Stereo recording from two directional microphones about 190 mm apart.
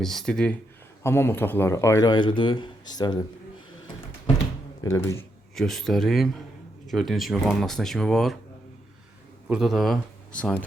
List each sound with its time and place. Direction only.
0.0 s speech: centre (ahead or behind); by 3.2 s 20° left (ahead or behind)
4.8 s speech: 15° left (ahead or behind)
5.5 s speech: centre (ahead or behind)
9.5 s speech: centre (ahead or behind)